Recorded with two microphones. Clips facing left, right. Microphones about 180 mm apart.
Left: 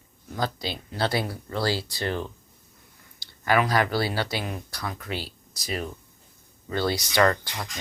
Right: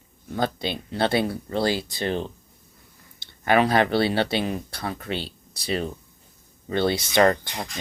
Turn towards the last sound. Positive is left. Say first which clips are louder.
# right 3 dB
turn(degrees=-25)  # may be behind; listen again after turning